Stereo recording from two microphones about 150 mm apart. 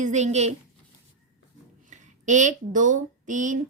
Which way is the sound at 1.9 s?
55° right (ahead or behind).